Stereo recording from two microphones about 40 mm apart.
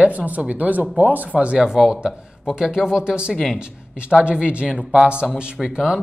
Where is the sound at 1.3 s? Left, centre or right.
Right.